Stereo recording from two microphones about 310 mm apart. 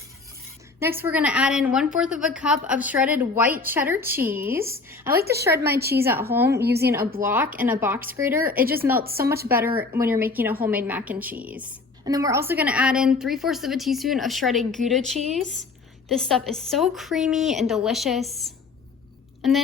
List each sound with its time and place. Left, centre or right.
0.8 s a woman's voice: centre
5.1 s a woman's voice: right
5.4 s speech: centre
5.7 s a woman's voice: right
6.3 s speech: centre
6.6 s a woman's voice: right
6.8 s speech: centre
8.4 s a woman's voice: right
8.7 s speech: centre
9.0 s a woman's voice: right
9.5 s a woman's voice: centre
19.4 s a sound: centre